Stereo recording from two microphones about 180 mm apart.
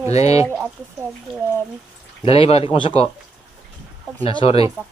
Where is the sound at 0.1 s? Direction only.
35° left (ahead or behind).